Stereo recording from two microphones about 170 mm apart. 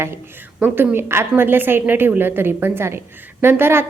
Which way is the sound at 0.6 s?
10° right (ahead or behind).